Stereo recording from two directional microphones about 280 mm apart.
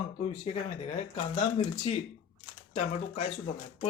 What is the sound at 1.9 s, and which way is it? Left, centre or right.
Speech, left.